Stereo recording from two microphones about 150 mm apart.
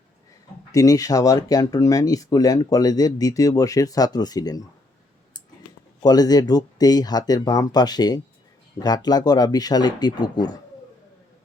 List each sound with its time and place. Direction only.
0.7 s speech: 25° left (ahead or behind)
6.0 s speech: 25° left (ahead or behind)